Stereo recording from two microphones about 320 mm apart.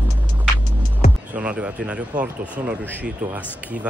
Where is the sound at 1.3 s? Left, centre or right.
Centre.